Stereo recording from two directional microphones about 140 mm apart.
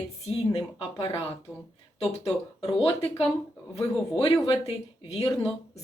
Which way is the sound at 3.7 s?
45° left (ahead or behind).